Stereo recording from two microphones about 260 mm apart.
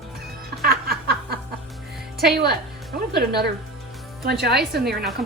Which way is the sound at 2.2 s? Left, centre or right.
Right.